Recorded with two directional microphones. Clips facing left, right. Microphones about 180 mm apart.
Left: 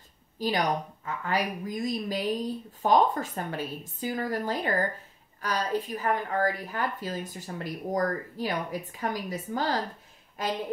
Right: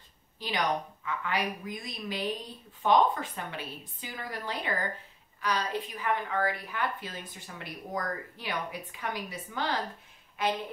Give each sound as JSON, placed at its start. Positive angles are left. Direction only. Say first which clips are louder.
{"t": 0.4, "sound": "a woman's voice", "louder": "left 4 dB", "side_deg": 40}